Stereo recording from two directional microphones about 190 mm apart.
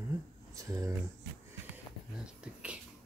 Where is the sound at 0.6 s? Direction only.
15° right (ahead or behind).